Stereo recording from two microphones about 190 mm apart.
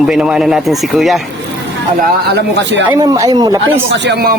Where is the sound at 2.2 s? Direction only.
65° right (ahead or behind).